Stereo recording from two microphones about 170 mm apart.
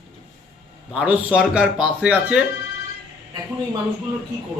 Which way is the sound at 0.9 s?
5° right (ahead or behind).